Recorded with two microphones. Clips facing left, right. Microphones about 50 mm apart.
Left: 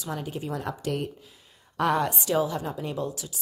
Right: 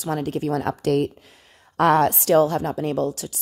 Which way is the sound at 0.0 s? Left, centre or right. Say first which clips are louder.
Right 8 dB; right.